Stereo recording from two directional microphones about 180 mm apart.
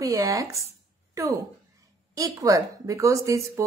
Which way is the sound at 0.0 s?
20° right (ahead or behind).